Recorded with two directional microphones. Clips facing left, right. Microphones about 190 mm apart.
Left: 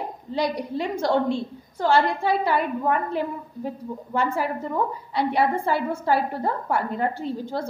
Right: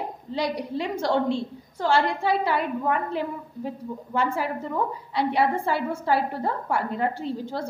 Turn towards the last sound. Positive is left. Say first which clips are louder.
# left 1 dB
turn(degrees=45)  # may be behind; listen again after turning